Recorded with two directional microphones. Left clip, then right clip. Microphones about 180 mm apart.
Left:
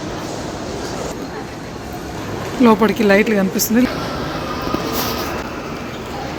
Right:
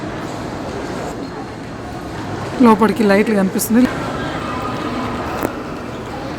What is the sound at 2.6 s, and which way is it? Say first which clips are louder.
Speech: right 1 dB; 10° right (ahead or behind).